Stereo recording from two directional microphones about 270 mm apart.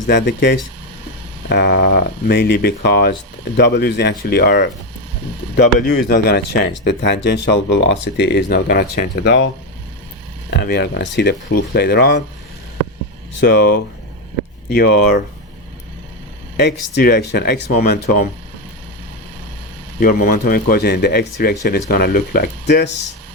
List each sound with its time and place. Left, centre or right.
0.1 s speech: left
5.8 s speech: left
10.6 s speech: left
13.4 s speech: left
16.6 s speech: left
20.0 s speech: left